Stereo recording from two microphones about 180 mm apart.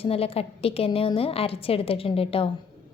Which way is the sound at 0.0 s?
35° left (ahead or behind).